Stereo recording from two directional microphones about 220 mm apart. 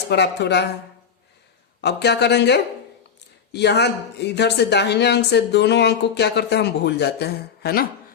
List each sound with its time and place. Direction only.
0.1 s speech: 50° left (ahead or behind)
1.8 s speech: 50° left (ahead or behind)